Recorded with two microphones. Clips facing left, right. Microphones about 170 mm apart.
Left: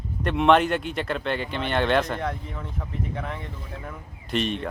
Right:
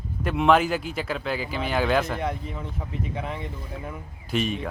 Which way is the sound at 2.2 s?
15° right (ahead or behind).